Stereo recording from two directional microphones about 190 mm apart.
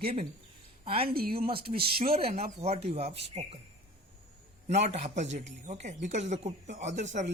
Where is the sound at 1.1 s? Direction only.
50° right (ahead or behind).